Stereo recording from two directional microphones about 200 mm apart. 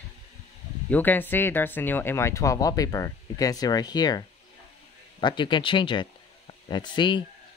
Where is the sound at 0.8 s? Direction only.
10° left (ahead or behind).